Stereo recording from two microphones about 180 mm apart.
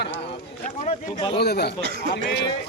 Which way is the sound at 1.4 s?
65° left (ahead or behind).